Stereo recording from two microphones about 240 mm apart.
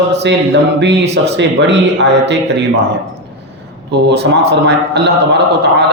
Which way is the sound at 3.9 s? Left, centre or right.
Right.